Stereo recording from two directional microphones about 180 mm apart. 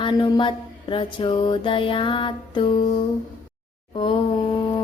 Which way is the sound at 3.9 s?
30° left (ahead or behind).